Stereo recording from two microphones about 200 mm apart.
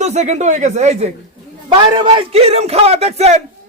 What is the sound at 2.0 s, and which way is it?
Speech, 25° right (ahead or behind).